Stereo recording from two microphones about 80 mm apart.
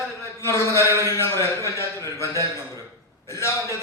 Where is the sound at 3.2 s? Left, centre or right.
Left.